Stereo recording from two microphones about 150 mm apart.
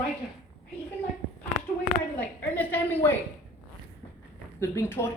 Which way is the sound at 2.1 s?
10° left (ahead or behind).